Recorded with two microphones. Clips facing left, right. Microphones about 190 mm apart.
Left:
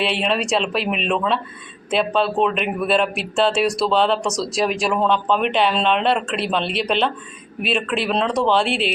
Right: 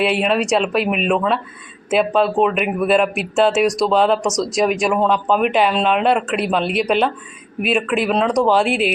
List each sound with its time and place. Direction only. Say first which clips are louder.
0.0 s speech: right 4 dB; 5° right (ahead or behind)